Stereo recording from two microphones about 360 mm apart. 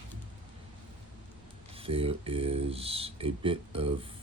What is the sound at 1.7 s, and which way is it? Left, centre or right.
Speech, centre.